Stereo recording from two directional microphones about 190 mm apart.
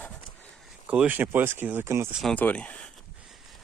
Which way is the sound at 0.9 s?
10° right (ahead or behind).